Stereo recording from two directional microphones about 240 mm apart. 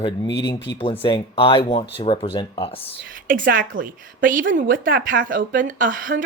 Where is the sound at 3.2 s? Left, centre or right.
Right.